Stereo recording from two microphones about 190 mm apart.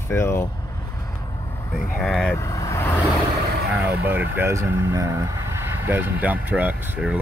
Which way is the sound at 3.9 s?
10° right (ahead or behind).